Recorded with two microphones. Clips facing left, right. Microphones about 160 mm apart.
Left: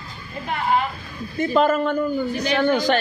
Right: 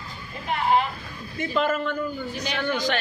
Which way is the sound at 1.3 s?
45° left (ahead or behind).